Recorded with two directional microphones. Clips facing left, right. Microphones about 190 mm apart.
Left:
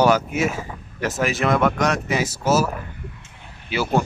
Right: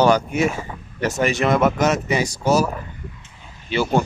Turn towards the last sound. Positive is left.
turn(degrees=5)  # may be behind; listen again after turning